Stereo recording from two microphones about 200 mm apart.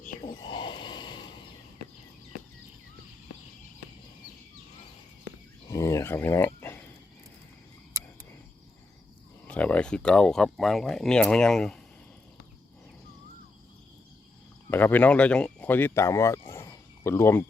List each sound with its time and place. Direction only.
0.0 s a sound: 40° left (ahead or behind)
0.4 s snort: 25° left (ahead or behind)
5.6 s a sound: 15° left (ahead or behind)
7.9 s cricket: 15° right (ahead or behind)
9.5 s speech: 5° left (ahead or behind)
14.7 s speech: 10° left (ahead or behind)